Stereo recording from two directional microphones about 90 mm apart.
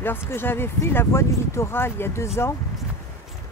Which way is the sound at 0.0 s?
25° left (ahead or behind).